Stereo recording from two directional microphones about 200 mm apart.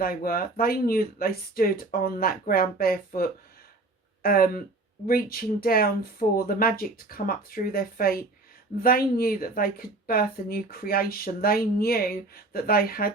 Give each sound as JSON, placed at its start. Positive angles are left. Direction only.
{"t": 0.0, "sound": "speech", "side_deg": 45}